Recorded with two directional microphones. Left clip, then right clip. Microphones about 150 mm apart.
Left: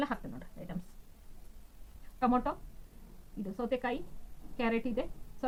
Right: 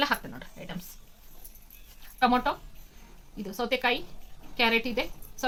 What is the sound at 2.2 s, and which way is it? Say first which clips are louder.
Speech: right 7 dB; 10° right (ahead or behind).